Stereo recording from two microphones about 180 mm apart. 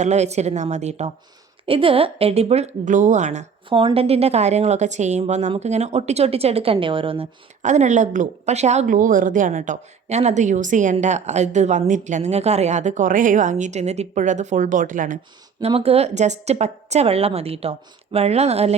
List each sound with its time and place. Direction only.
0.0 s a woman's voice: 40° right (ahead or behind)
3.7 s a woman's voice: 30° right (ahead or behind); by 15.2 s 45° right (ahead or behind)
15.6 s a woman's voice: 35° right (ahead or behind)